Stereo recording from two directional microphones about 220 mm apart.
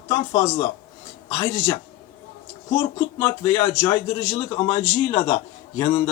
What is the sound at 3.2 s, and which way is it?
A man's voice, 20° left (ahead or behind).